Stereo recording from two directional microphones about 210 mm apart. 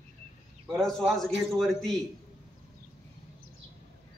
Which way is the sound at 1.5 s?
Centre (ahead or behind).